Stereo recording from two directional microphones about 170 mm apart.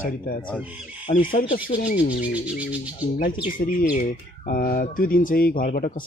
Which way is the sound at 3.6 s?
60° left (ahead or behind).